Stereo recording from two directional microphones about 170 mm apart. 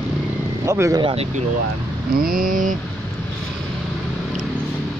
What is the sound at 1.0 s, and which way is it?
Speech, 35° right (ahead or behind).